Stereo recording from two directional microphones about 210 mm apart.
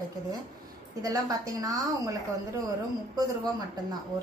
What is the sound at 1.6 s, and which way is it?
Speech, 15° right (ahead or behind).